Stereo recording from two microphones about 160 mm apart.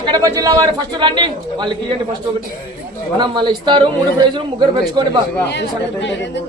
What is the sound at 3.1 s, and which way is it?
Speech, 30° right (ahead or behind).